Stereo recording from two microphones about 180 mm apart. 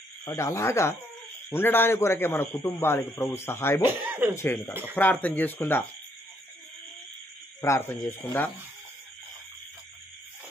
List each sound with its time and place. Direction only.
0.2 s a man's voice: 15° left (ahead or behind)
3.8 s speech: 10° right (ahead or behind)
4.4 s a man's voice: 10° left (ahead or behind)
7.6 s a man's voice: 15° left (ahead or behind)